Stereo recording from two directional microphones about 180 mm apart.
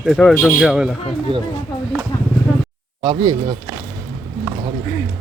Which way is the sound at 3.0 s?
25° right (ahead or behind).